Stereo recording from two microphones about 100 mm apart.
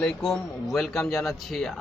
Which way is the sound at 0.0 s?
5° left (ahead or behind).